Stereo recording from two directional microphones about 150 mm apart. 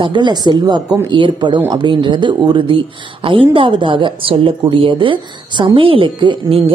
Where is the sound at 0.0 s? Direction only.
30° right (ahead or behind).